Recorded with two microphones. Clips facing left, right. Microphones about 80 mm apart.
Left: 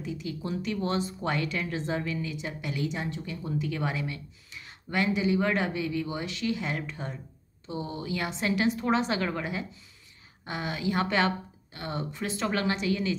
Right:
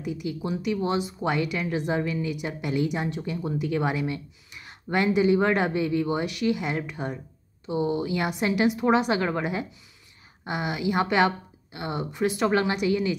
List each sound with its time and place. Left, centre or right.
0.0 s a woman's voice: centre